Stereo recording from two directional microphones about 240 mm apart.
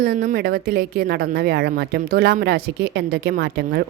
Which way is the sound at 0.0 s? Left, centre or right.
Right.